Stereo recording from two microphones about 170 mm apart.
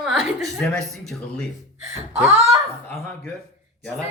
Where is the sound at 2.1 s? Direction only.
15° right (ahead or behind).